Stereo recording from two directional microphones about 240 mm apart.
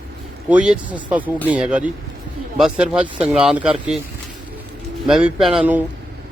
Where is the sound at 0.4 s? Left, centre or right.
Centre.